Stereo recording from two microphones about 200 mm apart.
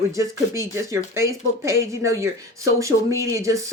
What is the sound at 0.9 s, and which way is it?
Speech, 15° right (ahead or behind).